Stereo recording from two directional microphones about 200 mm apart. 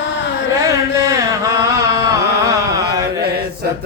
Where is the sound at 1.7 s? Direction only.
20° right (ahead or behind).